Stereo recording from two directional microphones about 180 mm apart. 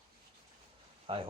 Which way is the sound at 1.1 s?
30° right (ahead or behind).